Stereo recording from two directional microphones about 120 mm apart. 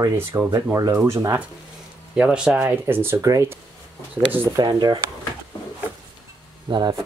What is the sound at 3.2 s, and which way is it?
Speech, 30° right (ahead or behind).